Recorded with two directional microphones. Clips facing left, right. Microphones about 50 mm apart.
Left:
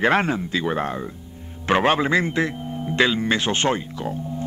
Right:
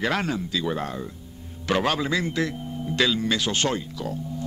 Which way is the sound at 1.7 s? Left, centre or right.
Left.